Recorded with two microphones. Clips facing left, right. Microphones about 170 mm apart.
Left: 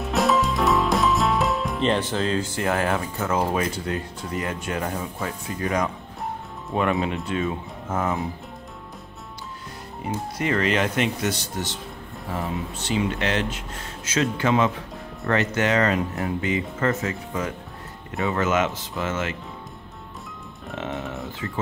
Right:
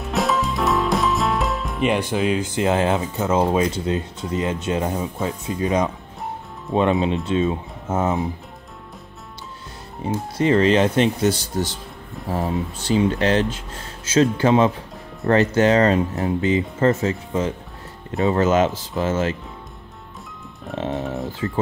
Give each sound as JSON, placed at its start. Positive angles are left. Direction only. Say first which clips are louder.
{"t": 0.0, "sound": "music", "louder": "left 1 dB", "side_deg": 0}
{"t": 1.8, "sound": "speech", "louder": "right 5 dB", "side_deg": -10}
{"t": 10.0, "sound": "speech", "louder": "right 6 dB", "side_deg": -30}
{"t": 20.7, "sound": "speech", "louder": "right 5 dB", "side_deg": -35}